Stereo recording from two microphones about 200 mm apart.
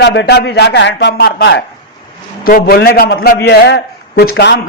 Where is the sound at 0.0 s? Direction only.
55° left (ahead or behind).